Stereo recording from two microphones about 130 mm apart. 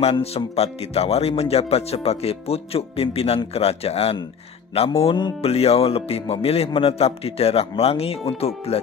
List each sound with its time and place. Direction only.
0.0 s speech: 50° left (ahead or behind)